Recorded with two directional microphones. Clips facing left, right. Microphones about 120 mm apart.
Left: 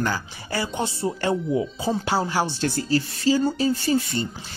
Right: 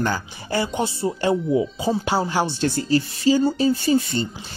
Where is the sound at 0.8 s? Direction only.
10° right (ahead or behind).